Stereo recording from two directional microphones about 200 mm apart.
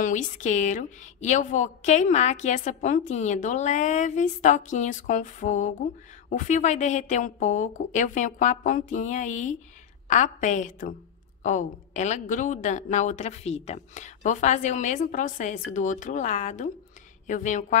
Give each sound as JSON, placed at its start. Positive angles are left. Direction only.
{"t": 0.0, "sound": "a woman's voice", "side_deg": 40}